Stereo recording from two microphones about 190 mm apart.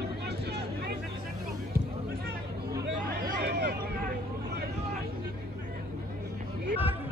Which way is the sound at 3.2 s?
60° right (ahead or behind).